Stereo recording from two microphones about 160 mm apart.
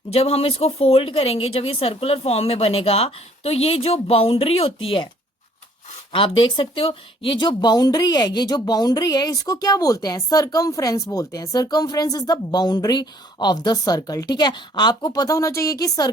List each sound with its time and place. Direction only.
0.1 s a woman's voice: 40° left (ahead or behind)
6.1 s speech: 35° left (ahead or behind)